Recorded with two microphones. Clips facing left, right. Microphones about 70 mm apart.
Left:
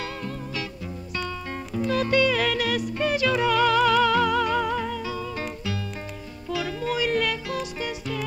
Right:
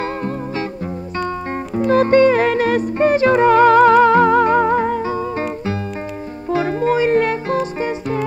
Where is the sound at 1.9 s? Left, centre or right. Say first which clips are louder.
Right 10 dB; right.